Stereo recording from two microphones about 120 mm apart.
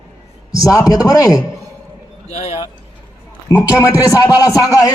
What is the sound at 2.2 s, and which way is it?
Speech, 65° left (ahead or behind).